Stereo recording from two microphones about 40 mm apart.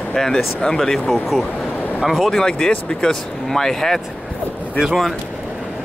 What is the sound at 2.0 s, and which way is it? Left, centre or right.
Speech, centre.